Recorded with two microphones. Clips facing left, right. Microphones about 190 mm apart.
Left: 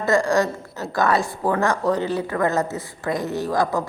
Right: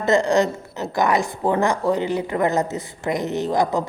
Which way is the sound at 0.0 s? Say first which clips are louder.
Right 2 dB; 20° right (ahead or behind).